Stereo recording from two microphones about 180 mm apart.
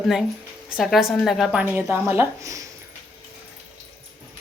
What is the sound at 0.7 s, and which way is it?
A woman's voice, centre (ahead or behind).